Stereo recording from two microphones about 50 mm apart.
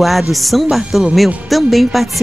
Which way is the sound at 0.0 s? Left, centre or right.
Centre.